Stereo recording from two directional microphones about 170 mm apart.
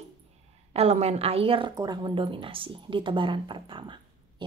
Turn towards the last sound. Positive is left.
turn(degrees=-30)  # may be behind; listen again after turning